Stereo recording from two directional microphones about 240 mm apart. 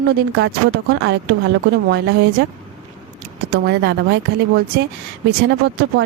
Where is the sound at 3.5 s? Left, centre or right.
Right.